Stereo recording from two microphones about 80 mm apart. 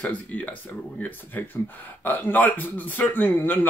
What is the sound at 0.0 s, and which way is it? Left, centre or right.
A man's voice, centre.